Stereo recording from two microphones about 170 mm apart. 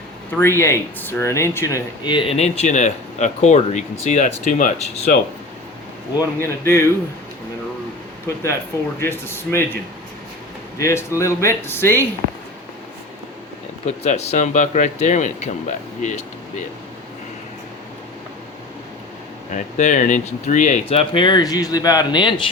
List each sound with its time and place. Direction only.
0.3 s speech: 15° left (ahead or behind); by 5.1 s 45° left (ahead or behind)
6.1 s speech: 15° left (ahead or behind)
9.0 s speech: 15° left (ahead or behind)
10.8 s speech: 15° left (ahead or behind)
13.8 s speech: 40° left (ahead or behind)
19.5 s speech: 45° left (ahead or behind); by 22.4 s 25° left (ahead or behind)